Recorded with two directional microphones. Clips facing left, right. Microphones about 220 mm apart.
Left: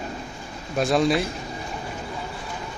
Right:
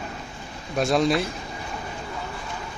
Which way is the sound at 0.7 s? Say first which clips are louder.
Left 1 dB; centre (ahead or behind).